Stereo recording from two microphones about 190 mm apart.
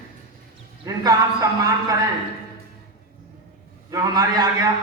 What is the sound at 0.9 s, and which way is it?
Speech, 20° right (ahead or behind).